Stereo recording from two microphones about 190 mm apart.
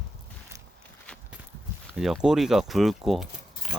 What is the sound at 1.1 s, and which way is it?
Walk, 5° left (ahead or behind).